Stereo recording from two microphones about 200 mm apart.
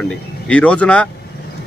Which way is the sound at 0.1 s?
5° left (ahead or behind).